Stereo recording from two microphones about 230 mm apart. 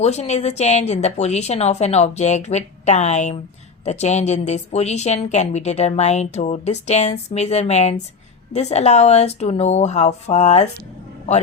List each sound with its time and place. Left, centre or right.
0.0 s a woman's voice: left